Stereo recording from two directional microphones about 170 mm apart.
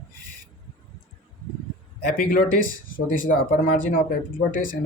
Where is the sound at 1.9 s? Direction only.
55° left (ahead or behind).